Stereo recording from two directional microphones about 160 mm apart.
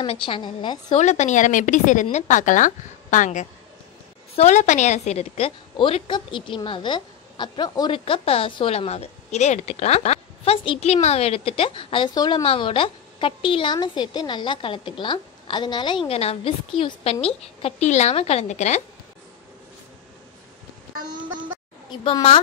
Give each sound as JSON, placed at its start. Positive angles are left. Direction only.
{"t": 0.0, "sound": "a woman's voice", "side_deg": 35}
{"t": 0.9, "sound": "a woman's voice", "side_deg": 45}
{"t": 22.0, "sound": "a woman's voice", "side_deg": 35}